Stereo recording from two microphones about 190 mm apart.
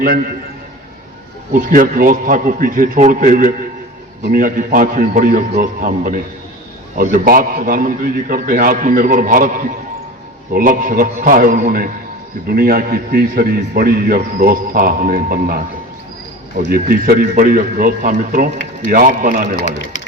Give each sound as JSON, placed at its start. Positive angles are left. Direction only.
{"t": 1.5, "sound": "a man's voice", "side_deg": -45}
{"t": 16.7, "sound": "a man's voice", "side_deg": -50}